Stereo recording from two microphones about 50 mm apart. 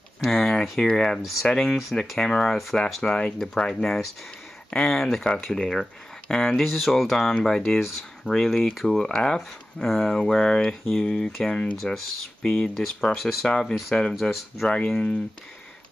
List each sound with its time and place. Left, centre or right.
0.2 s speech: centre
3.0 s speech: centre
13.5 s speech: centre
14.7 s speech: centre